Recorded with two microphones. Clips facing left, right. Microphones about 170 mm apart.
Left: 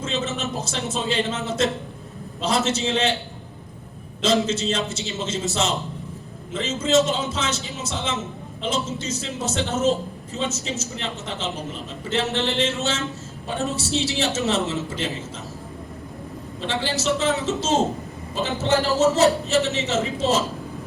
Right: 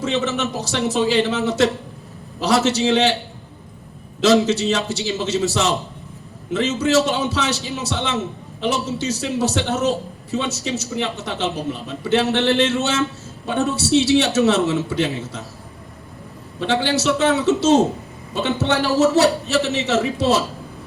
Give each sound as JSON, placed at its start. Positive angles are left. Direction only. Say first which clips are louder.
{"t": 0.0, "sound": "a man's voice", "louder": "right 5 dB", "side_deg": -70}
{"t": 4.2, "sound": "a man's voice", "louder": "right 6 dB", "side_deg": -70}
{"t": 16.6, "sound": "a man's voice", "louder": "right 7 dB", "side_deg": -70}